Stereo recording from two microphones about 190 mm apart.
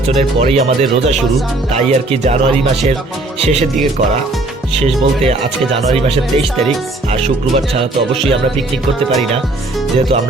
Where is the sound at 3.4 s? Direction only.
35° right (ahead or behind).